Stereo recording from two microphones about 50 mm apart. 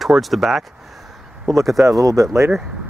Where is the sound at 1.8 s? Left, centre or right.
Right.